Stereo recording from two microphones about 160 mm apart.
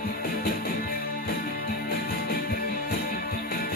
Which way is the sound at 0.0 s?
65° left (ahead or behind).